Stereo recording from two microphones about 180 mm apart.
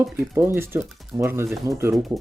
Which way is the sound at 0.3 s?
15° right (ahead or behind).